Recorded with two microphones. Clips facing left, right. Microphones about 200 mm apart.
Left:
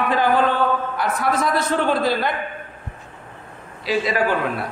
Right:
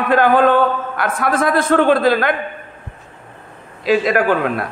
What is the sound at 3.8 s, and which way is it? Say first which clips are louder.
Speech: right 6 dB; 50° right (ahead or behind).